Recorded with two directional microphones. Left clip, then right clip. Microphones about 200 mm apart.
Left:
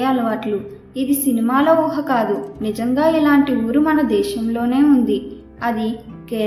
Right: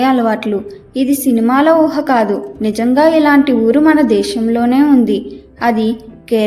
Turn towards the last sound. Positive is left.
turn(degrees=-40)  # may be behind; listen again after turning